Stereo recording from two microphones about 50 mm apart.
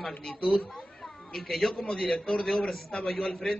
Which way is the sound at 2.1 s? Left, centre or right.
Centre.